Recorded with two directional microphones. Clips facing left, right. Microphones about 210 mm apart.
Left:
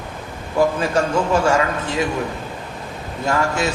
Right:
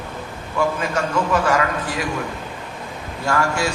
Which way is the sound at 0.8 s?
30° left (ahead or behind).